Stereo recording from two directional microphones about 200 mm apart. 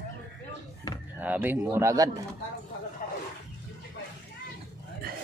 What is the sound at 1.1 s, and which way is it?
Speech, 10° right (ahead or behind).